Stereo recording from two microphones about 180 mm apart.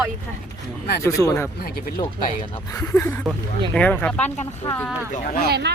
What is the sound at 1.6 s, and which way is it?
Speech, 55° left (ahead or behind).